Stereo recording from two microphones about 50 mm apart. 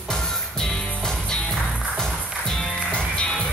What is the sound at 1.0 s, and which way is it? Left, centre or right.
Music, centre.